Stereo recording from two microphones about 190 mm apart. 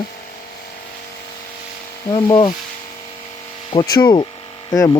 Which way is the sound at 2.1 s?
20° left (ahead or behind).